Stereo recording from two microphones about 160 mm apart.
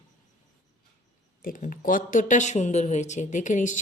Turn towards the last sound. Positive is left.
turn(degrees=50)  # may be behind; listen again after turning